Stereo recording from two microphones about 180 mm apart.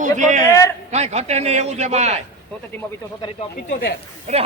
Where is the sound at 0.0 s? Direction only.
45° right (ahead or behind).